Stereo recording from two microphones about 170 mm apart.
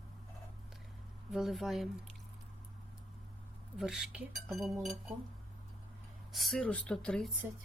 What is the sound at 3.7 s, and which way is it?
Speech, centre (ahead or behind).